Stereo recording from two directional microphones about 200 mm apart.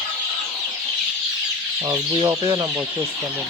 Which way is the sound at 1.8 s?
15° right (ahead or behind).